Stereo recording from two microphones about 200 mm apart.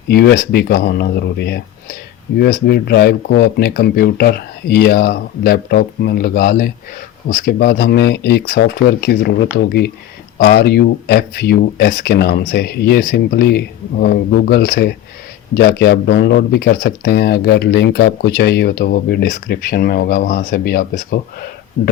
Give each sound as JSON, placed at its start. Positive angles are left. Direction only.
{"t": 0.1, "sound": "speech", "side_deg": 55}